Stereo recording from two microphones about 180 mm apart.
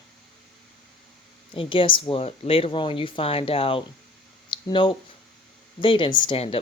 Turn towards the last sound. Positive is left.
turn(degrees=30)  # may be behind; listen again after turning